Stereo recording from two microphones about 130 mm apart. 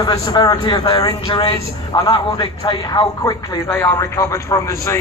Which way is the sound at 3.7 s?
20° left (ahead or behind).